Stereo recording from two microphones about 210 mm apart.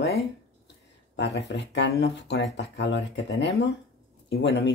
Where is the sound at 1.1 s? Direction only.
55° left (ahead or behind).